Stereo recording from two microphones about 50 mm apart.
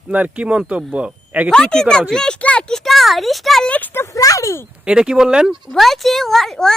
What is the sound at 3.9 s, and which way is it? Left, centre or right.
Speech, left.